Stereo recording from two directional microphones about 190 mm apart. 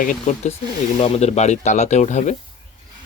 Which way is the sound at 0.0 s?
45° left (ahead or behind).